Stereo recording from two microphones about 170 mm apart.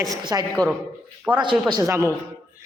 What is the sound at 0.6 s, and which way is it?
Speech, 5° left (ahead or behind).